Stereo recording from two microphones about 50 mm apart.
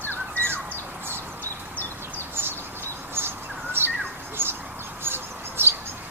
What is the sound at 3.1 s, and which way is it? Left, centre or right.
Bird, right.